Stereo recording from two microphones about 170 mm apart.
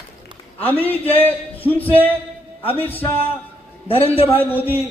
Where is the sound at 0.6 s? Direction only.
10° left (ahead or behind).